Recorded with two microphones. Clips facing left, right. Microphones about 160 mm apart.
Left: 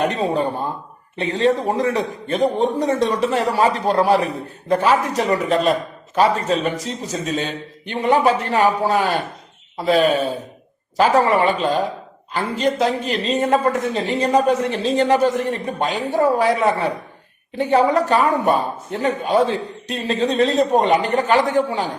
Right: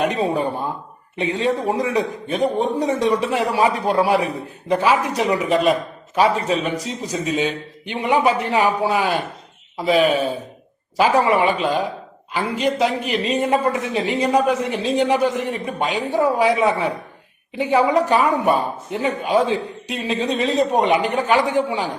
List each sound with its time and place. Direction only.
0.0 s speech: 10° right (ahead or behind)